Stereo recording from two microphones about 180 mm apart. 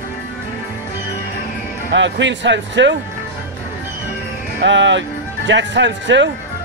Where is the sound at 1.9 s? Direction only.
90° right.